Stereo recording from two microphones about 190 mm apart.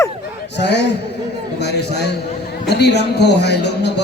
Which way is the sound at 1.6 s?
60° left (ahead or behind).